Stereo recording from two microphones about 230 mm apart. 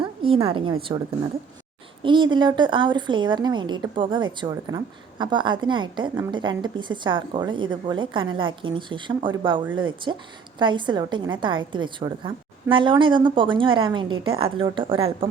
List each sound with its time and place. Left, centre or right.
0.0 s a woman's voice: right